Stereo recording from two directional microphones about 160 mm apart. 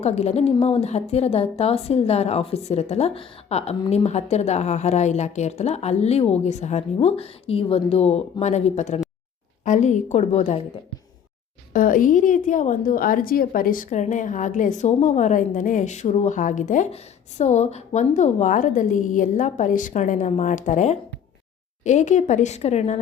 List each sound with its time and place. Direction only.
0.0 s a woman's voice: 45° left (ahead or behind)
11.7 s a woman's voice: 60° left (ahead or behind); by 23.0 s 45° left (ahead or behind)